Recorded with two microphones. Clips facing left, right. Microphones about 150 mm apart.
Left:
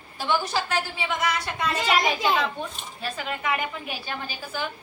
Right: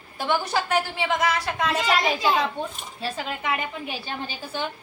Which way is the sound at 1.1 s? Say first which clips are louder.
Right 3 dB; 90° right.